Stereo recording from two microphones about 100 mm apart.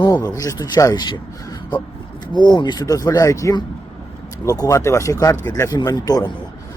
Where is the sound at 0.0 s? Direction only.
40° left (ahead or behind).